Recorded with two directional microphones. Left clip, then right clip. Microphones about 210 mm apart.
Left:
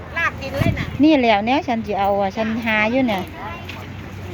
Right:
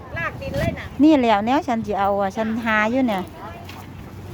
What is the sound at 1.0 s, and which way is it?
A woman's voice, 20° right (ahead or behind).